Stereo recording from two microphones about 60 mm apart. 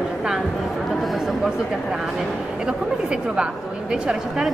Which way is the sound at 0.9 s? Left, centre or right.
Centre.